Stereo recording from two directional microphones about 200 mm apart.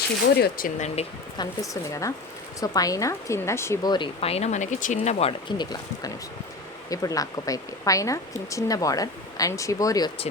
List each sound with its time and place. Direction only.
0.3 s speech: 50° left (ahead or behind)
0.9 s a woman's voice: 20° left (ahead or behind)